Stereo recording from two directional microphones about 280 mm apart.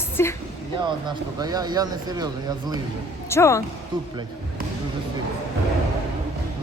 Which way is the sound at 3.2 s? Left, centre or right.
Centre.